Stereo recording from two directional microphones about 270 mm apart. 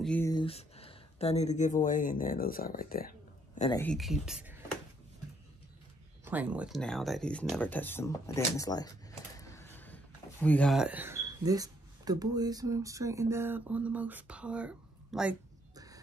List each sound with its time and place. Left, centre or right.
0.0 s speech: centre; by 3.1 s left
3.7 s speech: centre
6.2 s speech: centre
9.4 s a sound: centre
10.4 s speech: centre
15.7 s crow: centre